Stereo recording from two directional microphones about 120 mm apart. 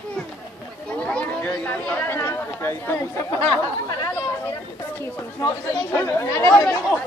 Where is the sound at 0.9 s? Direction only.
10° left (ahead or behind).